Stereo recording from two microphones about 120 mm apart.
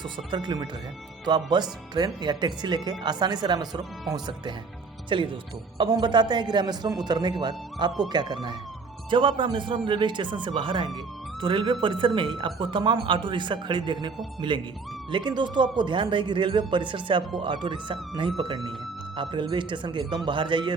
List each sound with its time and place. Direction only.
0.3 s speech: 40° right (ahead or behind)